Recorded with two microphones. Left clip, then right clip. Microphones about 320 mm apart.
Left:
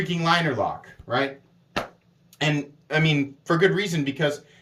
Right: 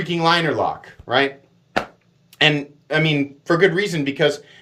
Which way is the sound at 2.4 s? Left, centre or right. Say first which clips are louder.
Right 9 dB; centre.